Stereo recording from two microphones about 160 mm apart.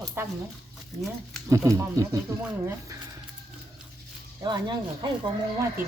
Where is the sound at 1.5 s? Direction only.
20° right (ahead or behind).